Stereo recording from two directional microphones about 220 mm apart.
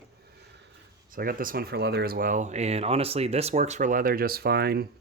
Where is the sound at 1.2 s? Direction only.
40° right (ahead or behind).